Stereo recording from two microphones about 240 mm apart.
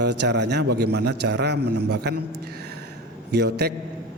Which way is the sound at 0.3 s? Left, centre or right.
Right.